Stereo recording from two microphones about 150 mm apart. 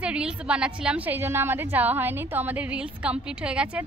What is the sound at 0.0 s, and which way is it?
A woman's voice, 5° right (ahead or behind).